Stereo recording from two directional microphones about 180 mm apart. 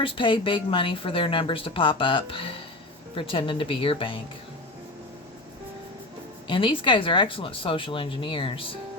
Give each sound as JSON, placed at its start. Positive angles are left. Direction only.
{"t": 0.0, "sound": "a woman's voice", "side_deg": 30}
{"t": 6.5, "sound": "a woman's voice", "side_deg": 30}